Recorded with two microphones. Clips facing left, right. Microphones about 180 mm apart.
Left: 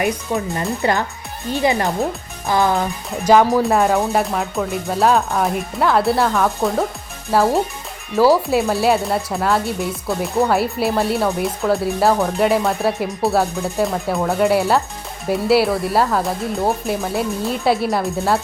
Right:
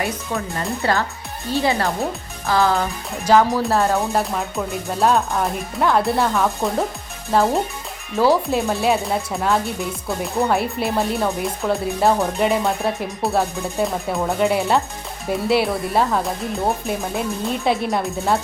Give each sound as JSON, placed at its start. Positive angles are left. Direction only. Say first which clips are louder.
{"t": 0.0, "sound": "speech", "louder": "left 4 dB", "side_deg": 15}
{"t": 3.8, "sound": "speech", "louder": "left 3 dB", "side_deg": 0}